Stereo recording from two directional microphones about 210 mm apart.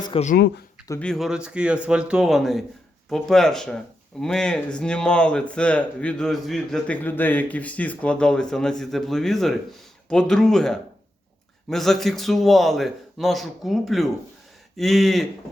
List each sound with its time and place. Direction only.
0.0 s speech: 30° left (ahead or behind)
0.3 s speech: 50° left (ahead or behind)
0.9 s speech: 5° left (ahead or behind)